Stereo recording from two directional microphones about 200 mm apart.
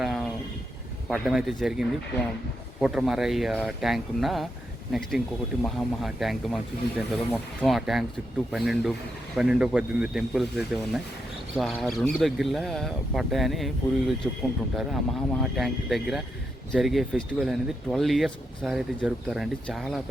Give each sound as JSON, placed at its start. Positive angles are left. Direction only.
{"t": 0.0, "sound": "vehicle", "side_deg": 0}
{"t": 1.0, "sound": "speech", "side_deg": 0}